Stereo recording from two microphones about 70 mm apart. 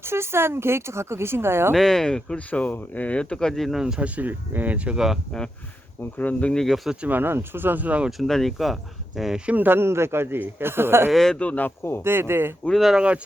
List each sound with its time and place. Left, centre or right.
0.0 s speech: right
1.7 s speech: centre
2.5 s speech: left; by 4.1 s centre
4.1 s speech: right
5.3 s speech: centre
6.1 s speech: left
6.5 s speech: centre
7.0 s speech: right
8.2 s speech: centre
9.5 s speech: right
11.1 s speech: centre
11.8 s speech: left
12.0 s speech: right
12.6 s speech: centre